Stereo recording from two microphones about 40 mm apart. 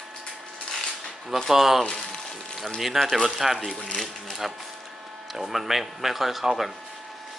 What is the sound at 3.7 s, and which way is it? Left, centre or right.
Speech, left.